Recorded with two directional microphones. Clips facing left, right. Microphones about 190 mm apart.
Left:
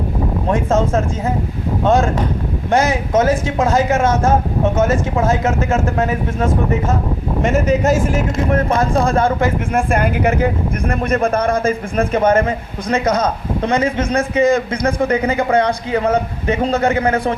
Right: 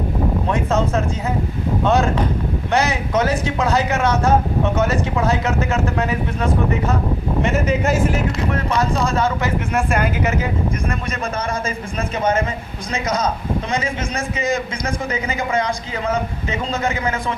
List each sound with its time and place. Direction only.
0.5 s speech: 50° left (ahead or behind)
2.6 s speech: 50° left (ahead or behind)